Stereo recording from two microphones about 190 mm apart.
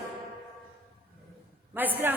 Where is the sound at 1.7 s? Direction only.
10° right (ahead or behind).